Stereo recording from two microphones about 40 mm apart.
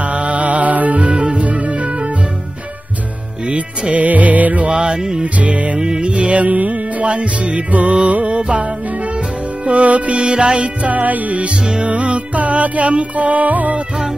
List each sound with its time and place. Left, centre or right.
0.0 s music: right
3.4 s music: right
4.6 s music: right
5.2 s music: right
5.8 s music: right
9.7 s music: right
10.2 s music: right
11.6 s music: right
11.9 s music: right